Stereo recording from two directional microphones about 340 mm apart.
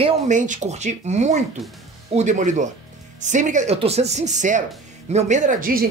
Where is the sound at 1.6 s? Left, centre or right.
Centre.